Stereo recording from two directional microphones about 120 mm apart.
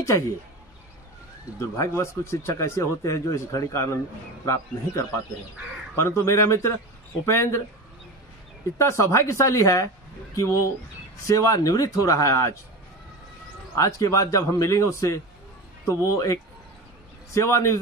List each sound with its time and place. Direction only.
1.6 s speech: 25° left (ahead or behind)
5.9 s speech: 25° left (ahead or behind)
8.7 s speech: 25° left (ahead or behind)
13.7 s speech: 25° left (ahead or behind)